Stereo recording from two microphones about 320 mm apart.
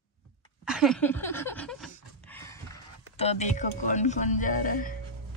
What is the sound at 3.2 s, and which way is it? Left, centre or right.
Speech, left.